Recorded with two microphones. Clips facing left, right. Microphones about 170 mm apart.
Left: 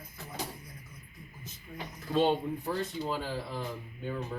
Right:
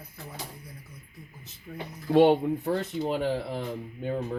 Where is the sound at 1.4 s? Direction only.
65° right (ahead or behind).